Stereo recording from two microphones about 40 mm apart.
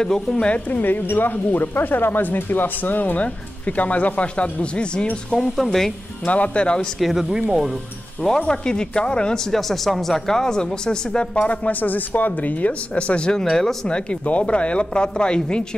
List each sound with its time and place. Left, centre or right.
0.0 s speech: centre
0.7 s speech: left
5.6 s speech: centre
6.2 s speech: left
7.0 s speech: centre
7.3 s speech: centre
8.2 s speech: centre
11.3 s speech: left
13.4 s speech: centre
13.8 s speech: left